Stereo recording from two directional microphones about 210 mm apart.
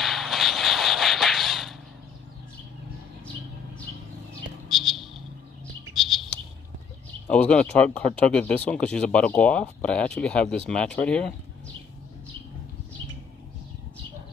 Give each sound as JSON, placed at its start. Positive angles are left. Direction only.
{"t": 0.0, "sound": "a sound", "side_deg": 0}
{"t": 4.6, "sound": "music", "side_deg": 0}
{"t": 5.9, "sound": "bird", "side_deg": 0}
{"t": 7.2, "sound": "speech", "side_deg": 5}